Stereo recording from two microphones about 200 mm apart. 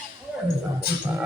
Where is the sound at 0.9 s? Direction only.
50° left (ahead or behind).